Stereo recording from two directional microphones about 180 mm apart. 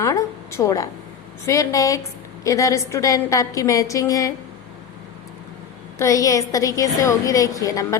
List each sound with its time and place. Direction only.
0.0 s a woman's voice: 15° left (ahead or behind)
6.0 s a woman's voice: 20° left (ahead or behind)